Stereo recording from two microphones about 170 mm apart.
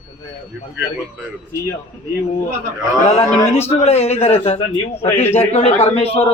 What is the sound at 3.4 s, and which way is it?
Speech, 15° left (ahead or behind).